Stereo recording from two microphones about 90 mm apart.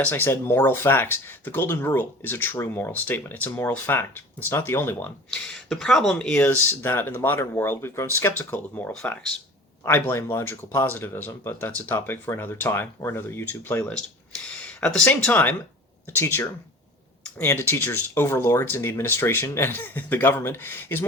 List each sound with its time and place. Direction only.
0.0 s speech: 25° left (ahead or behind)
5.3 s speech: 5° left (ahead or behind)
9.8 s speech: 25° left (ahead or behind)